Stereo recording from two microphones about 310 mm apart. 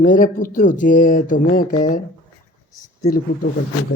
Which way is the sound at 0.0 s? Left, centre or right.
Left.